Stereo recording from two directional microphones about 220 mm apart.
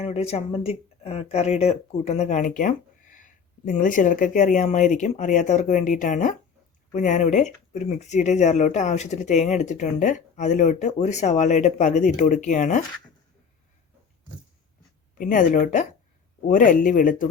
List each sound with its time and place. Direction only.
0.0 s speech: 30° left (ahead or behind)
15.2 s speech: 35° left (ahead or behind)